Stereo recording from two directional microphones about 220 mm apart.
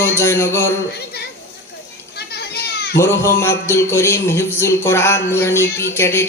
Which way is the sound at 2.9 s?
10° left (ahead or behind).